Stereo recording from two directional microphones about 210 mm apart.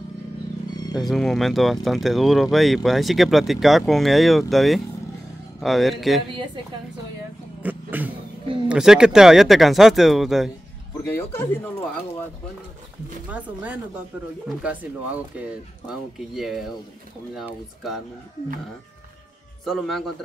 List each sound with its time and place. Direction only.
0.9 s speech: centre (ahead or behind)
6.3 s a woman's voice: 20° right (ahead or behind)
7.6 s a sound: 10° right (ahead or behind)
8.6 s speech: 5° right (ahead or behind)
11.1 s speech: 10° left (ahead or behind)
13.3 s speech: 5° right (ahead or behind)
16.3 s speech: centre (ahead or behind)
19.6 s speech: centre (ahead or behind)